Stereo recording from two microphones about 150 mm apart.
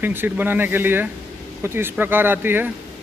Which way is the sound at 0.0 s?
15° right (ahead or behind).